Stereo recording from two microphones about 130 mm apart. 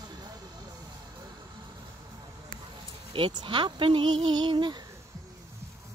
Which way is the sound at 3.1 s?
40° right (ahead or behind).